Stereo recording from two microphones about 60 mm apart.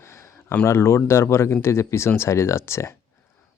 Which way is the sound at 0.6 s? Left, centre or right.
Left.